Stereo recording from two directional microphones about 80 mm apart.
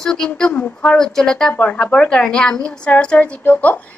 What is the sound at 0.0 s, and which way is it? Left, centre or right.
Speech, centre.